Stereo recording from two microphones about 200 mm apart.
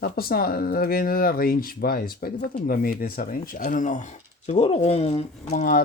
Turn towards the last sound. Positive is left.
turn(degrees=40)  # may be behind; listen again after turning